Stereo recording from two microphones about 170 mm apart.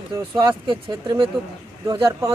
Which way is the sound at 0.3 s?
25° right (ahead or behind).